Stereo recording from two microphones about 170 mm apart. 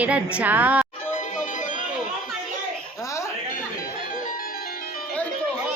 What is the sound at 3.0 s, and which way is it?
Chuckle, 20° left (ahead or behind).